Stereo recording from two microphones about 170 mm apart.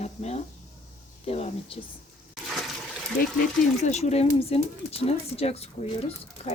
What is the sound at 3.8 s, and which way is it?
Speech, 40° left (ahead or behind).